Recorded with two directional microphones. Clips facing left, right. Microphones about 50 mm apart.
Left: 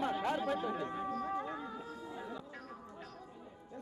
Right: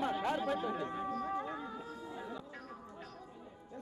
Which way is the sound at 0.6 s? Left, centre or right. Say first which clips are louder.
Even; centre.